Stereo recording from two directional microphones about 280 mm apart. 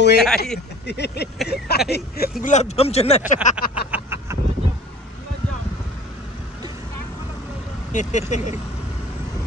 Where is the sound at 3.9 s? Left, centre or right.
Centre.